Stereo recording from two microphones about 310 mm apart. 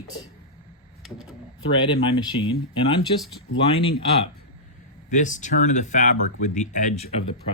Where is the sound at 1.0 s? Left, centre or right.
Centre.